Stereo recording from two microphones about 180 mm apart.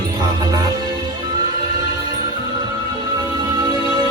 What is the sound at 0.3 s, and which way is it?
Music, 20° right (ahead or behind).